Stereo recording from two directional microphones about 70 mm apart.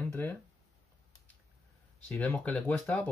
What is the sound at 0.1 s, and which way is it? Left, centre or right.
Speech, left.